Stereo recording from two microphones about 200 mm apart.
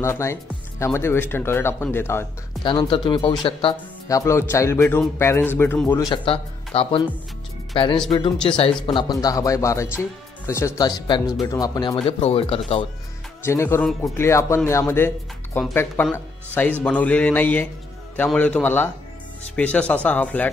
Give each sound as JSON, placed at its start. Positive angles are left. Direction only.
{"t": 0.0, "sound": "speech", "side_deg": 15}
{"t": 2.6, "sound": "speech", "side_deg": 25}
{"t": 4.2, "sound": "speech", "side_deg": 15}
{"t": 6.0, "sound": "speech", "side_deg": 25}
{"t": 13.4, "sound": "speech", "side_deg": 15}